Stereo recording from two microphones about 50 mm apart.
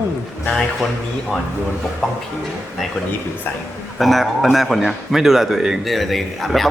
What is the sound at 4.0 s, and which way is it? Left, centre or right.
A man's voice, centre.